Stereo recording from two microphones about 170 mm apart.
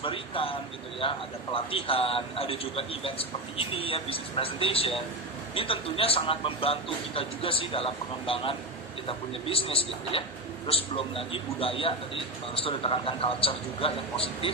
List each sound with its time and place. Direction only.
0.0 s a man's voice: 30° left (ahead or behind)